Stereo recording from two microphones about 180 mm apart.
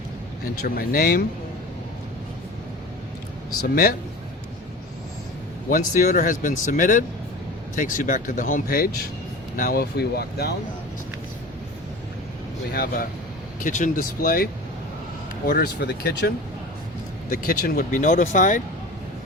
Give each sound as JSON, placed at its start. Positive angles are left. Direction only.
{"t": 0.6, "sound": "speech", "side_deg": 55}
{"t": 5.7, "sound": "speech", "side_deg": 45}
{"t": 12.7, "sound": "speech", "side_deg": 55}